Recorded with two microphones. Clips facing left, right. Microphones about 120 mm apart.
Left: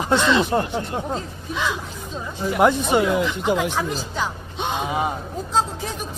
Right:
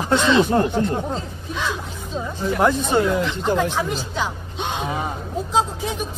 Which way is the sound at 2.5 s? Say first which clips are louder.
Left 1 dB; 15° left (ahead or behind).